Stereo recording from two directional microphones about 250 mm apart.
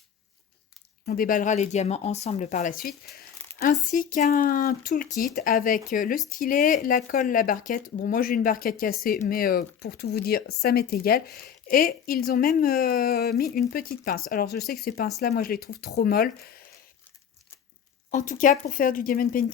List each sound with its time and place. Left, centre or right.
1.0 s speech: left
18.1 s speech: left